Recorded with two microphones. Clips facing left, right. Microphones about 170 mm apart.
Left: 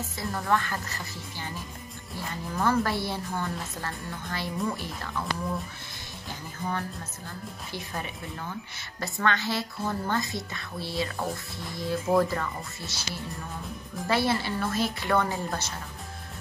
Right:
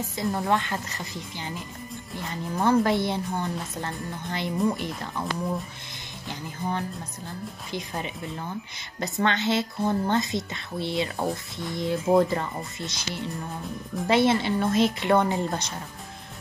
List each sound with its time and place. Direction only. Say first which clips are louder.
0.2 s speech: right 3 dB; 20° right (ahead or behind)
2.5 s speech: right 5 dB; 20° right (ahead or behind)
7.7 s speech: right 4 dB; 20° right (ahead or behind)